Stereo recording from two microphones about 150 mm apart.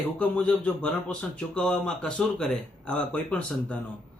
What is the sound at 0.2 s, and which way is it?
A man's voice, 10° left (ahead or behind).